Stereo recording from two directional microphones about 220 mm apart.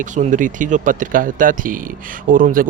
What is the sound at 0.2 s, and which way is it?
Speech, 35° right (ahead or behind).